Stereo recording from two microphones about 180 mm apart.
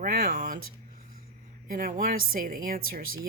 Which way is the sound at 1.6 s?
50° right (ahead or behind).